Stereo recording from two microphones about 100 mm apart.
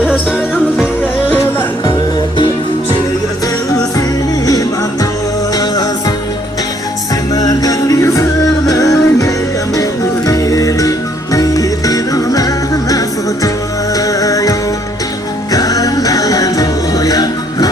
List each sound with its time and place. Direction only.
0.0 s music: 5° right (ahead or behind)
5.5 s music: 40° left (ahead or behind)
7.3 s music: 40° left (ahead or behind)
15.5 s music: 35° left (ahead or behind)